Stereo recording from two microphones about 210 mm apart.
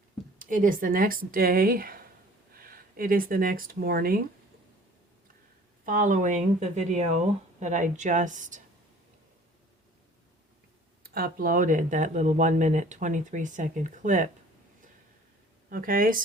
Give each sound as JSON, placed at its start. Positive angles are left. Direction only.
{"t": 0.3, "sound": "speech", "side_deg": -40}
{"t": 5.8, "sound": "speech", "side_deg": -40}
{"t": 11.0, "sound": "speech", "side_deg": -45}
{"t": 15.7, "sound": "speech", "side_deg": -40}